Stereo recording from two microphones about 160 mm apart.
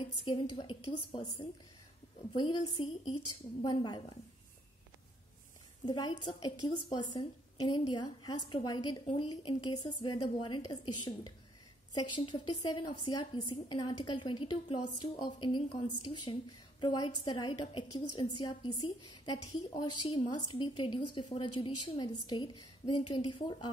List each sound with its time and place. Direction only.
0.2 s a woman's voice: 30° left (ahead or behind)
2.3 s a woman's voice: 30° left (ahead or behind)
5.9 s a woman's voice: 25° left (ahead or behind)